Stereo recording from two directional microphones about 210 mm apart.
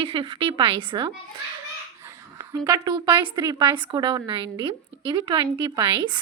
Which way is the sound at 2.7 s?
20° right (ahead or behind).